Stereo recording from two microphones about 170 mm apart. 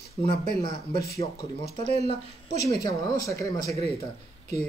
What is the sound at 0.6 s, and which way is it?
Speech, 25° left (ahead or behind).